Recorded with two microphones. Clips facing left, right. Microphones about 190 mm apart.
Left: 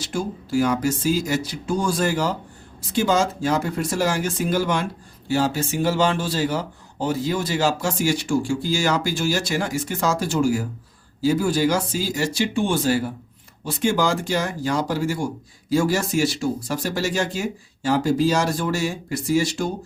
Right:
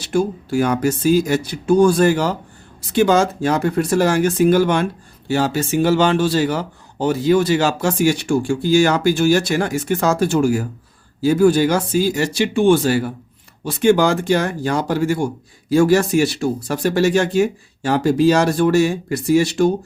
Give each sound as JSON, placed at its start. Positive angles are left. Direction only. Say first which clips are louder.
{"t": 0.0, "sound": "speech", "louder": "right 8 dB", "side_deg": -60}